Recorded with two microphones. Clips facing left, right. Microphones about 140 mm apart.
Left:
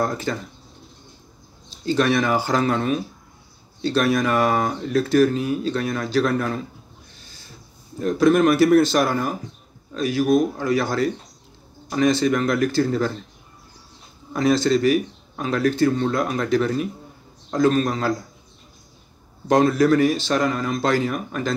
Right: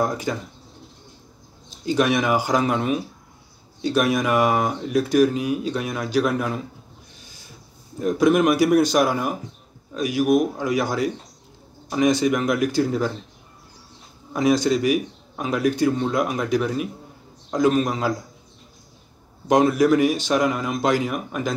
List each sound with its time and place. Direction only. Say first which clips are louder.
0.0 s speech: even; 10° right (ahead or behind)
1.9 s speech: even; 15° right (ahead or behind)
8.0 s speech: left 1 dB; 15° right (ahead or behind)
14.3 s speech: left 1 dB; 15° right (ahead or behind)
19.4 s speech: even; 15° right (ahead or behind)